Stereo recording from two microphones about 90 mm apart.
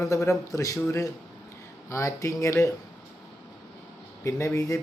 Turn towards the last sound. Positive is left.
turn(degrees=35)  # may be behind; listen again after turning